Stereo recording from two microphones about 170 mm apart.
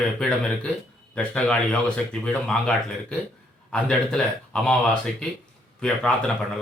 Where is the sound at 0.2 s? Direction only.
5° left (ahead or behind).